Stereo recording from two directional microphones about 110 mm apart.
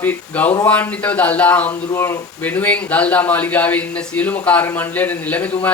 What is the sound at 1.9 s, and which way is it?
Speech, 25° left (ahead or behind).